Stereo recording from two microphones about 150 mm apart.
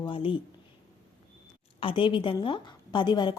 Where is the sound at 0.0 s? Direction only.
35° left (ahead or behind).